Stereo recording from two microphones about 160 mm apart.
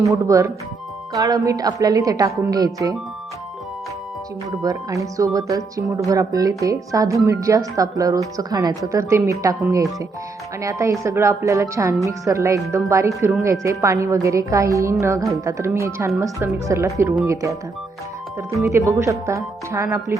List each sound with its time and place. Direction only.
0.1 s speech: 20° right (ahead or behind)
4.6 s speech: 20° right (ahead or behind)
18.7 s speech: 15° right (ahead or behind)